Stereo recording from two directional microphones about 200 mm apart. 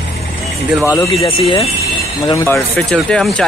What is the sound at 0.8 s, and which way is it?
Speech, 15° left (ahead or behind).